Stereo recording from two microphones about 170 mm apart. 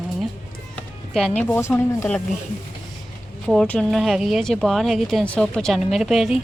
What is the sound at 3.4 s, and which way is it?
A woman's voice, 5° left (ahead or behind).